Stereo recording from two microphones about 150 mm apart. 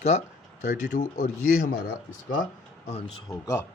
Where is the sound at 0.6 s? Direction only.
55° left (ahead or behind).